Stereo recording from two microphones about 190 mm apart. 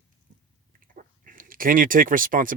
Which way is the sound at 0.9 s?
45° right (ahead or behind).